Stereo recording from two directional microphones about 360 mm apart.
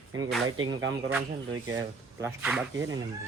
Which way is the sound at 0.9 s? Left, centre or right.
Centre.